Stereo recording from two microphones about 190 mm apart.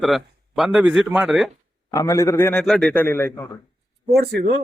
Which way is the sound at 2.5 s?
Centre (ahead or behind).